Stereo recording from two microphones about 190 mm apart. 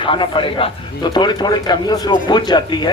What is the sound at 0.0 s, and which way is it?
A man's voice, 25° left (ahead or behind).